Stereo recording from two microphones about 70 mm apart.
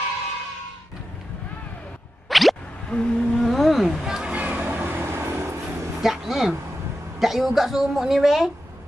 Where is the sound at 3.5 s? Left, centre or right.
Centre; by 5.9 s right.